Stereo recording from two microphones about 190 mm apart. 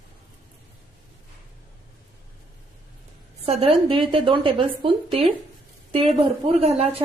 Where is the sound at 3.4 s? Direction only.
30° right (ahead or behind).